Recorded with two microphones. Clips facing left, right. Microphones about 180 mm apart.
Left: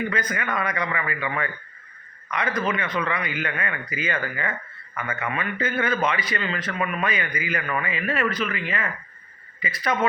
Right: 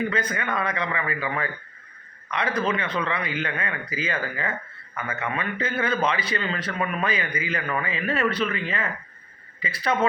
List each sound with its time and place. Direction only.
0.1 s speech: 30° right (ahead or behind)